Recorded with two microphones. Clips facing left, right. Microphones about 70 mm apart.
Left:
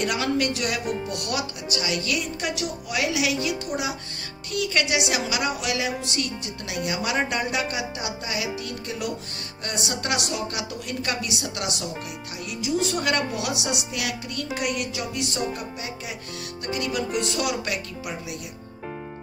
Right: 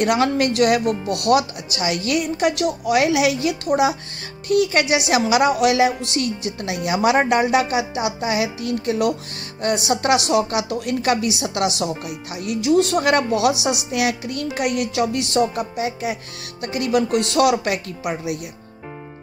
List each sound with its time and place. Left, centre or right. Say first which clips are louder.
0.0 s a woman's voice: right 6 dB; right